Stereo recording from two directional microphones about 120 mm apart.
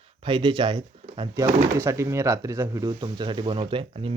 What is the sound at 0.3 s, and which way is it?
Speech, 40° right (ahead or behind).